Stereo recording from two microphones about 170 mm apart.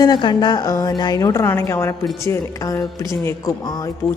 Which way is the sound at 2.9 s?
15° left (ahead or behind).